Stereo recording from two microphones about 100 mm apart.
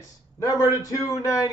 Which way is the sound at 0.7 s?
35° left (ahead or behind).